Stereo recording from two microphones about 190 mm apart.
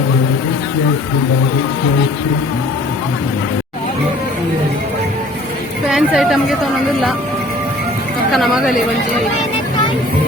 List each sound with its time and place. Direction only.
5.9 s a woman's voice: centre (ahead or behind)
8.3 s speech: centre (ahead or behind)